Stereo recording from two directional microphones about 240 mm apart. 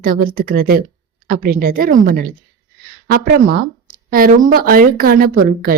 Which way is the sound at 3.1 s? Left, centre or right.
Right.